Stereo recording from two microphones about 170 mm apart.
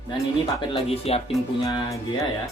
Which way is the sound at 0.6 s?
35° left (ahead or behind).